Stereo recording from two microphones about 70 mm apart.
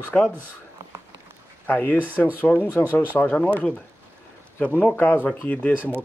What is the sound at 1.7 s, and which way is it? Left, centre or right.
Speech, left.